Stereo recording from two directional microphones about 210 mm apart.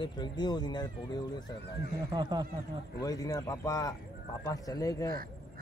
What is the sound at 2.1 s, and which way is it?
Speech, 20° right (ahead or behind).